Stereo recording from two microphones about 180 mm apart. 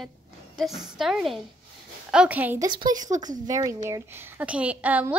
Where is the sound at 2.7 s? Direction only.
25° right (ahead or behind).